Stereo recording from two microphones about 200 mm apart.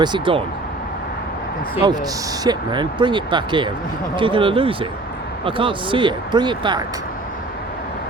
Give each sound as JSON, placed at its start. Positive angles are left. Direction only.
{"t": 0.0, "sound": "speech", "side_deg": -25}
{"t": 1.8, "sound": "speech", "side_deg": -20}